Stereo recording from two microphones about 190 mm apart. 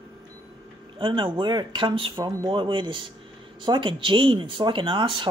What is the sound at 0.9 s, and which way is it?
Speech, 25° right (ahead or behind).